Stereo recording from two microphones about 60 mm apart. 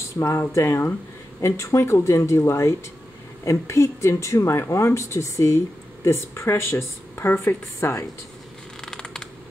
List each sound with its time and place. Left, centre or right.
0.2 s speech: left
0.6 s speech: left
8.8 s creak: centre